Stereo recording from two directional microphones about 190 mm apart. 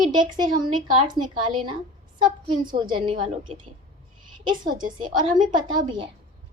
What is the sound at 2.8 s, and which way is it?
Speech, 25° right (ahead or behind).